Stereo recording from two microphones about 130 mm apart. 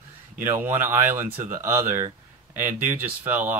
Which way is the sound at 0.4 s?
15° right (ahead or behind).